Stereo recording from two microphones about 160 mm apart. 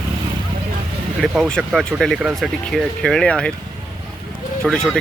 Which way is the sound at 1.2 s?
Centre (ahead or behind).